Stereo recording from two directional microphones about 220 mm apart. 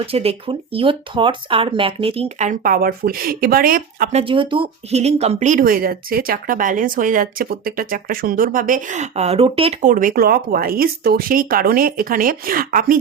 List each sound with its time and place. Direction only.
0.0 s speech: 25° right (ahead or behind)
4.2 s speech: 25° right (ahead or behind)
9.9 s speech: 40° right (ahead or behind)